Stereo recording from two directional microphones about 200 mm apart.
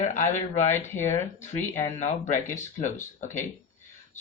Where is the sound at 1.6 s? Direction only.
35° left (ahead or behind).